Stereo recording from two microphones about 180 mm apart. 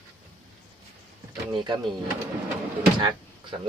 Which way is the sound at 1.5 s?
25° right (ahead or behind).